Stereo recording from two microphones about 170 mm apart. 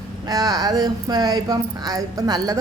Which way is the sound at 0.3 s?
20° right (ahead or behind).